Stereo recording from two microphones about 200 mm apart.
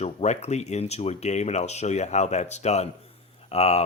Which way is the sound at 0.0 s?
35° left (ahead or behind).